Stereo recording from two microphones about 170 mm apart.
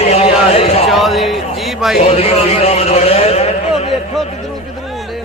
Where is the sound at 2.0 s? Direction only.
40° left (ahead or behind).